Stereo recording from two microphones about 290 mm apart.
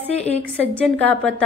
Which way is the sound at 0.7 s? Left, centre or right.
Centre.